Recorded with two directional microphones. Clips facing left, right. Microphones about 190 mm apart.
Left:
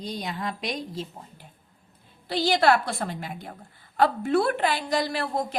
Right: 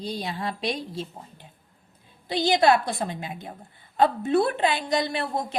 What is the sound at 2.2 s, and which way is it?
A woman's voice, 20° right (ahead or behind).